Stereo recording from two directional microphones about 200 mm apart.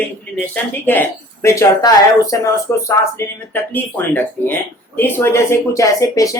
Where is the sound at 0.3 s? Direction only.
10° left (ahead or behind).